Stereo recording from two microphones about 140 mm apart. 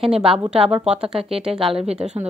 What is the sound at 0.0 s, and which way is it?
Speech, 40° right (ahead or behind).